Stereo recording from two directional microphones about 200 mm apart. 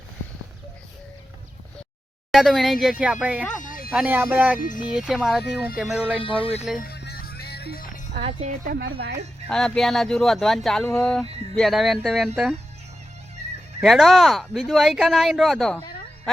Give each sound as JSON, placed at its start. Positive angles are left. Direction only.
{"t": 2.3, "sound": "speech", "side_deg": 0}
{"t": 3.6, "sound": "a sound", "side_deg": 45}
{"t": 3.9, "sound": "speech", "side_deg": -10}
{"t": 6.2, "sound": "speech", "side_deg": 25}
{"t": 6.7, "sound": "music", "side_deg": 50}
{"t": 8.1, "sound": "speech", "side_deg": -35}
{"t": 9.5, "sound": "speech", "side_deg": 5}
{"t": 13.8, "sound": "speech", "side_deg": 0}